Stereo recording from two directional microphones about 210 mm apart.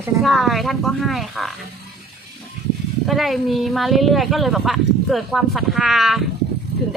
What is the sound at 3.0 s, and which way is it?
Speech, centre (ahead or behind).